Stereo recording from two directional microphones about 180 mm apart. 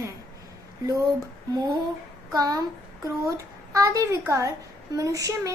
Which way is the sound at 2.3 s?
20° right (ahead or behind).